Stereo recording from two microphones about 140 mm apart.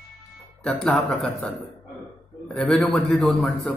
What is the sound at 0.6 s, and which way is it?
Speech, 5° left (ahead or behind).